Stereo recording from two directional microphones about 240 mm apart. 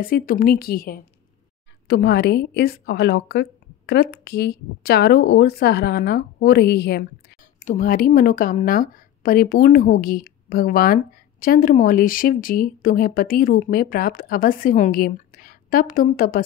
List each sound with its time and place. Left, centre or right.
0.1 s a woman's voice: left